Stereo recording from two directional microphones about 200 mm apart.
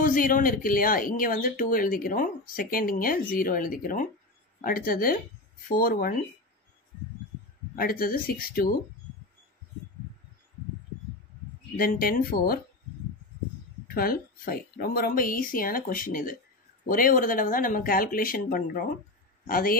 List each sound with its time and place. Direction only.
0.0 s speech: 40° left (ahead or behind)
7.7 s speech: 45° left (ahead or behind)
11.7 s speech: 45° left (ahead or behind)
13.9 s speech: 45° left (ahead or behind)